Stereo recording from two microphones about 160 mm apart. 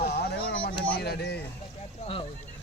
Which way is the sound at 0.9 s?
85° left.